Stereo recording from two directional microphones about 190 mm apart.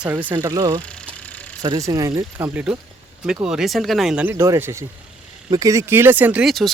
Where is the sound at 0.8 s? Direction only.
5° left (ahead or behind).